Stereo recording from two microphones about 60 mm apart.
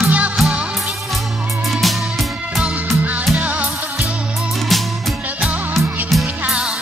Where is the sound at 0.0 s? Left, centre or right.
Right.